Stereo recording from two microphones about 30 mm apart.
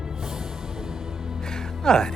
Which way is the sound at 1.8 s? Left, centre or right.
Centre.